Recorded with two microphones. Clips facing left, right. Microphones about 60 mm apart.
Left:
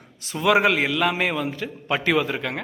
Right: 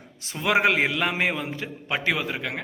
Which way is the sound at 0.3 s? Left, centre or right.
Right.